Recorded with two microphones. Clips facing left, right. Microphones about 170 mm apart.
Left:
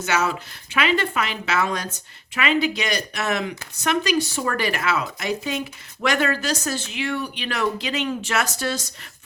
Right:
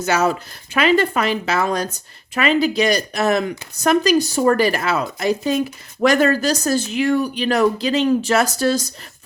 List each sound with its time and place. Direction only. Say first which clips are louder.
0.0 s speech: right 5 dB; 35° right (ahead or behind)